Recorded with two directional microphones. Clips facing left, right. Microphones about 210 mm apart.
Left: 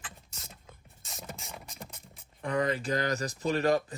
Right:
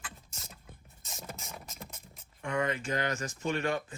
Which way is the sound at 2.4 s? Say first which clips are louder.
Left 3 dB; 35° left (ahead or behind).